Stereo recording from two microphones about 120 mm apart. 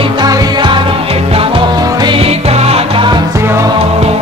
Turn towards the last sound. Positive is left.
turn(degrees=-45)  # may be behind; listen again after turning